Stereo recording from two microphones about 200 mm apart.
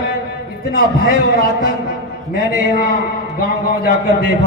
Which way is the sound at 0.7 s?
75° right (ahead or behind).